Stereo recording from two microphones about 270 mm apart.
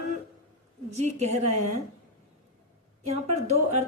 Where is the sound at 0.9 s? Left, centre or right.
Right.